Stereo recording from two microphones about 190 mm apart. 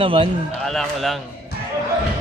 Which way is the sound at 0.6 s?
Centre (ahead or behind).